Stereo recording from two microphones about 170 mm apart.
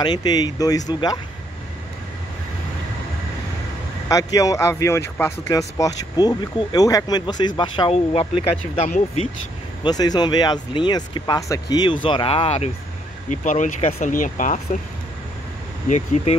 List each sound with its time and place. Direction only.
0.0 s speech: 25° left (ahead or behind)
4.1 s speech: 20° left (ahead or behind); by 9.3 s 40° left (ahead or behind)
9.8 s speech: 25° left (ahead or behind); by 14.1 s 40° left (ahead or behind)
14.1 s speech: 50° left (ahead or behind)